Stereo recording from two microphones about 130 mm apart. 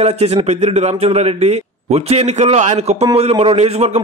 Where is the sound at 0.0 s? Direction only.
55° right (ahead or behind).